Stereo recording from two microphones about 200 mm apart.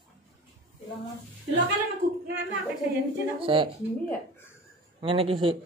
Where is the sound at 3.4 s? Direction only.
25° right (ahead or behind).